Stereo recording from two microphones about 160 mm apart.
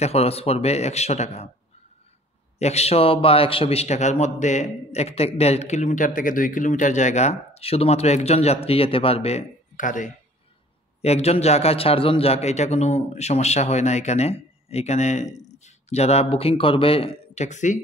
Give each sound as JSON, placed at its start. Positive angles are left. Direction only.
{"t": 0.0, "sound": "a man's voice", "side_deg": 40}
{"t": 2.6, "sound": "a man's voice", "side_deg": 40}
{"t": 11.0, "sound": "a man's voice", "side_deg": 40}